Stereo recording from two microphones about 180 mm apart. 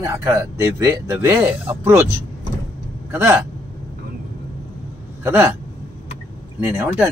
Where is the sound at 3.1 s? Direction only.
15° right (ahead or behind).